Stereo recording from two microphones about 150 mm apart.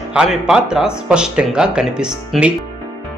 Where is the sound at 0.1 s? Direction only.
5° right (ahead or behind).